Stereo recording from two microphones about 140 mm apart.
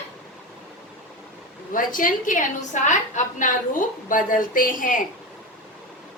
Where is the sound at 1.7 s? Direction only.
75° left (ahead or behind).